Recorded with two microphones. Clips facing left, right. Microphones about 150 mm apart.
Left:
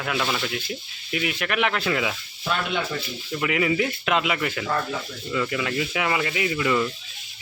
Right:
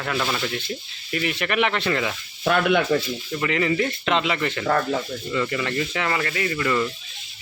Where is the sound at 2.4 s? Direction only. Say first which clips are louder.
Right 7 dB; 60° right (ahead or behind).